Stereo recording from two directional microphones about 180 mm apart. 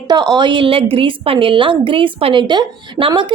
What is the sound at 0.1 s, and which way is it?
A woman's voice, 20° right (ahead or behind).